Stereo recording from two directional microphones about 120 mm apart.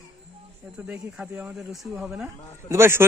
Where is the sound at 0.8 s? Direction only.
20° right (ahead or behind).